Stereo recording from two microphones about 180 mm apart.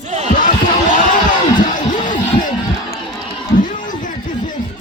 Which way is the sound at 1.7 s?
45° left (ahead or behind).